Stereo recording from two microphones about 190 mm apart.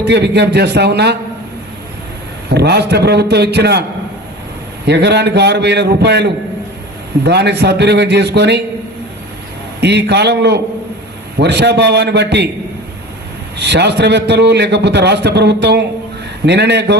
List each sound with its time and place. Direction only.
0.1 s a man's voice: 60° right (ahead or behind)
2.5 s a man's voice: 60° right (ahead or behind)
4.9 s a man's voice: 60° right (ahead or behind)
9.8 s a man's voice: 60° right (ahead or behind)
13.6 s a man's voice: 65° right (ahead or behind)